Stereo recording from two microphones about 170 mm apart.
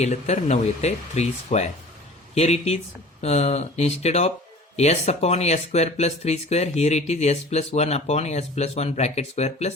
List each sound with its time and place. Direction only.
0.0 s speech: 40° left (ahead or behind)